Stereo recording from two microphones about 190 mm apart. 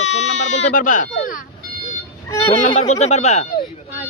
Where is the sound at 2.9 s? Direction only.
35° left (ahead or behind).